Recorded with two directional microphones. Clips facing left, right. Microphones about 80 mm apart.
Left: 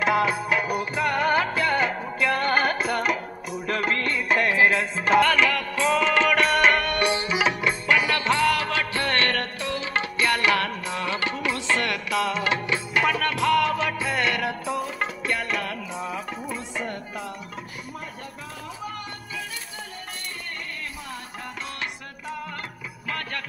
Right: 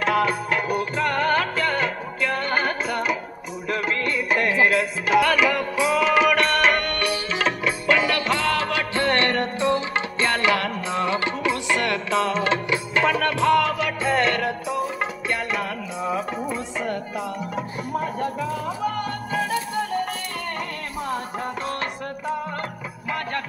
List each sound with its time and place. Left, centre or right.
0.0 s music: centre
5.5 s music: centre
5.9 s music: centre
7.0 s music: left
7.3 s music: centre
7.8 s music: left
8.9 s music: right
14.1 s music: centre
15.2 s music: centre